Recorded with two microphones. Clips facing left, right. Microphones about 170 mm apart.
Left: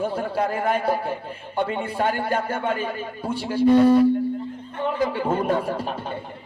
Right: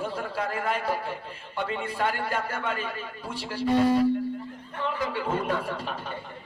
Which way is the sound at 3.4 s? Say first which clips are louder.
Left 7 dB; 55° left (ahead or behind).